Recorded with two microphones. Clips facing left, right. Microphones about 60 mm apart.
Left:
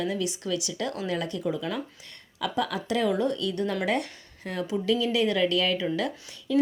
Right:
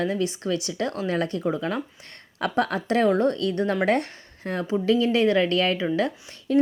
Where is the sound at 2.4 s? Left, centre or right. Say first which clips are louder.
Right 4 dB; right.